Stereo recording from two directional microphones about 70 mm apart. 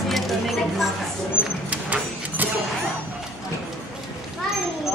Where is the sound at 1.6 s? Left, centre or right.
Right.